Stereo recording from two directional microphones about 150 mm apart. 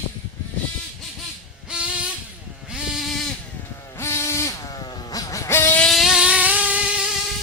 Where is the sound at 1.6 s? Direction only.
5° right (ahead or behind).